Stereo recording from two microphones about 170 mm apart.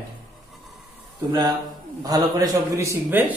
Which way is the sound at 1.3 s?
25° right (ahead or behind).